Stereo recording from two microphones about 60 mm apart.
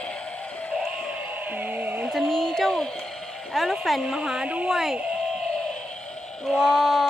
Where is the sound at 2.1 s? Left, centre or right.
Centre.